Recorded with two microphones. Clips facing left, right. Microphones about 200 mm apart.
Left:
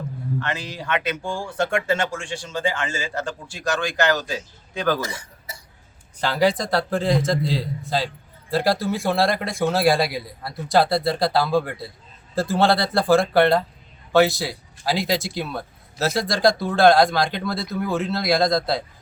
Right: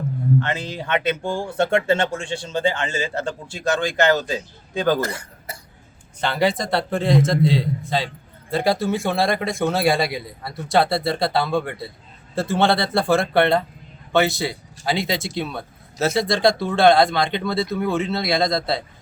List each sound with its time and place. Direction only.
0.3 s a man's voice: 25° right (ahead or behind)
4.9 s speech: 60° right (ahead or behind)
6.1 s a man's voice: centre (ahead or behind)